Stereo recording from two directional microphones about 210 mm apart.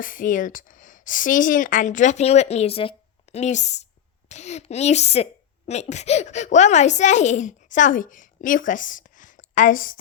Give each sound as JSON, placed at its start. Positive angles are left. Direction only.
{"t": 0.0, "sound": "a woman's voice", "side_deg": 40}